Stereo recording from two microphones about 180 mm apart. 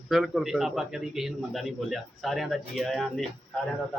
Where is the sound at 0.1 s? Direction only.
Centre (ahead or behind).